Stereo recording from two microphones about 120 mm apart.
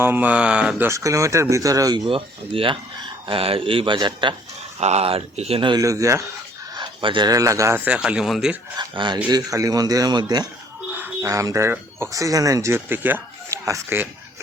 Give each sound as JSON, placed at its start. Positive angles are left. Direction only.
{"t": 0.0, "sound": "speech", "side_deg": -15}
{"t": 0.9, "sound": "speech", "side_deg": -25}
{"t": 2.0, "sound": "speech", "side_deg": -50}
{"t": 4.8, "sound": "speech", "side_deg": -65}
{"t": 5.8, "sound": "speech", "side_deg": -25}
{"t": 6.7, "sound": "a sound", "side_deg": -40}
{"t": 7.3, "sound": "speech", "side_deg": -30}
{"t": 7.9, "sound": "speech", "side_deg": -10}
{"t": 8.8, "sound": "speech", "side_deg": -40}
{"t": 9.5, "sound": "speech", "side_deg": -30}
{"t": 10.9, "sound": "a sound", "side_deg": -15}
{"t": 11.3, "sound": "speech", "side_deg": -25}